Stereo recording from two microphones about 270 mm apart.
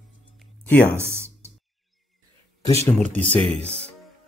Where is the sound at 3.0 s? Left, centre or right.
Right.